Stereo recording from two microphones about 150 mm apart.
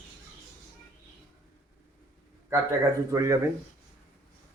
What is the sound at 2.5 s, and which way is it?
Speech, 20° right (ahead or behind).